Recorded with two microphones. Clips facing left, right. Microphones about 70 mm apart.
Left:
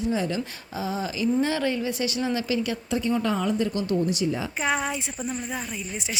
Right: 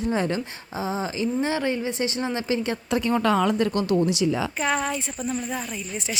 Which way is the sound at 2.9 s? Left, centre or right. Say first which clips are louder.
Right 4 dB; right.